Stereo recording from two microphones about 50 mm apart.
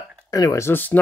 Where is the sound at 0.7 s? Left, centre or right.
Left.